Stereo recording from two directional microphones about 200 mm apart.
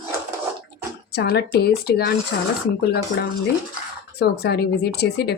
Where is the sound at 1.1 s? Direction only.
55° left (ahead or behind).